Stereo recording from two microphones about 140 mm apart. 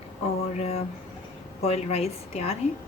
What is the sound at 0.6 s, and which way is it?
A woman's voice, 50° left (ahead or behind).